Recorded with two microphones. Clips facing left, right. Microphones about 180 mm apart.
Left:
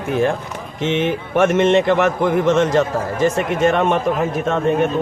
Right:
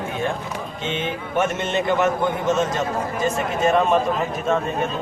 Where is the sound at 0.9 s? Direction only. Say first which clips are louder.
Left 6 dB; 80° left.